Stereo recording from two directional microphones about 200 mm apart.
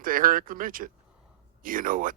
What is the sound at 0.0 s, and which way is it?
A man's voice, 45° right (ahead or behind).